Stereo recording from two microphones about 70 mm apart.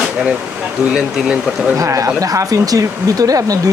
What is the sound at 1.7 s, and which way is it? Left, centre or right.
Speech, right.